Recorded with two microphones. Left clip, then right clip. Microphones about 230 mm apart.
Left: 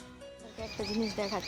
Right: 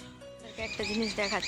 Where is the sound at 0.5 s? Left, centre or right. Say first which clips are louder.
Right 4 dB; centre.